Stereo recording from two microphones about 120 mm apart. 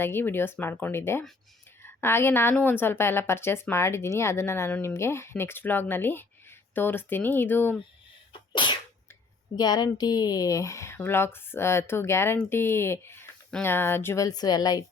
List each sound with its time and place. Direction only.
0.0 s speech: 20° left (ahead or behind)
8.3 s sneeze: 40° left (ahead or behind)
9.6 s speech: 35° left (ahead or behind)
14.3 s speech: 35° left (ahead or behind)